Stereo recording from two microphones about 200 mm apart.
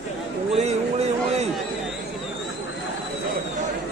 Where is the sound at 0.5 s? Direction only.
35° right (ahead or behind).